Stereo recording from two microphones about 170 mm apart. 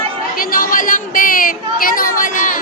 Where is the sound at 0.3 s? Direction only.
55° left (ahead or behind).